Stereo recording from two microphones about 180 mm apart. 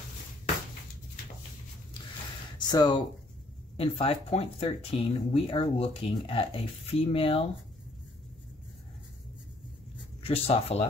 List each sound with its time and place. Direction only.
2.7 s speech: 20° left (ahead or behind)
10.2 s speech: 35° left (ahead or behind)